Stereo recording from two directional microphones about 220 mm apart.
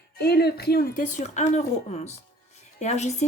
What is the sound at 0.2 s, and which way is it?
A woman's voice, 45° left (ahead or behind).